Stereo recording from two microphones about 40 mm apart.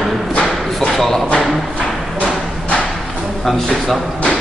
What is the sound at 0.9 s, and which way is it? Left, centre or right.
Speech, centre.